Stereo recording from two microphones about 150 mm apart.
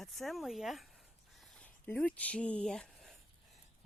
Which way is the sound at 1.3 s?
Centre (ahead or behind).